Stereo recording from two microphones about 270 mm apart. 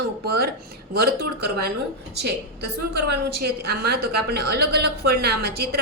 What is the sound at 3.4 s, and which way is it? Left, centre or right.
A woman's voice, right.